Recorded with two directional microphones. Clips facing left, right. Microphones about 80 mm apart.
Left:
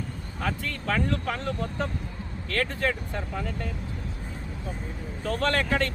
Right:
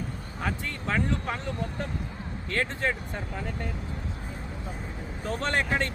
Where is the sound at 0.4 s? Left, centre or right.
Right.